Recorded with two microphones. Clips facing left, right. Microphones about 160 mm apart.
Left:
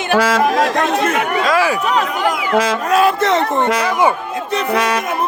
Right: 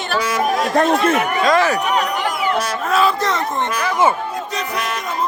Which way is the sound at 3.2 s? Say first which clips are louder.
Left 6 dB; 65° left (ahead or behind).